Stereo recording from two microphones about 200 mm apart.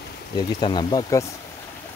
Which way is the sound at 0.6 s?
20° left (ahead or behind).